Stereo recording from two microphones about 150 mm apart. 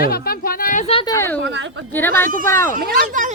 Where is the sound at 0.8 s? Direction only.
35° left (ahead or behind).